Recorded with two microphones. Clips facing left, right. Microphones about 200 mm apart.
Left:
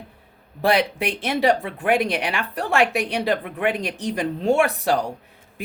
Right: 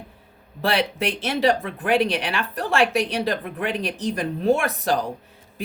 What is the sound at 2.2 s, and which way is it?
Speech, 15° left (ahead or behind).